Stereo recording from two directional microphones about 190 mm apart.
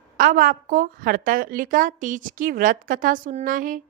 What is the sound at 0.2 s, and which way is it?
A woman's voice, 45° right (ahead or behind).